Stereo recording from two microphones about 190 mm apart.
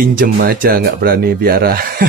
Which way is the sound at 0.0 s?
50° right (ahead or behind).